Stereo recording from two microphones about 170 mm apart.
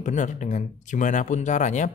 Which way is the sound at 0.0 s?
45° left (ahead or behind).